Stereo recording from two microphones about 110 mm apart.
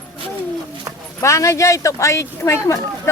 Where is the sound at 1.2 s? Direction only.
25° left (ahead or behind).